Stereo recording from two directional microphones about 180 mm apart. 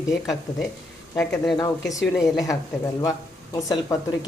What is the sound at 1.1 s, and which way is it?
Speech, 5° left (ahead or behind).